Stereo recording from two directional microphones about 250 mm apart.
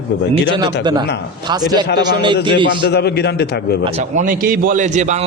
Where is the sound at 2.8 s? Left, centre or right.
Left.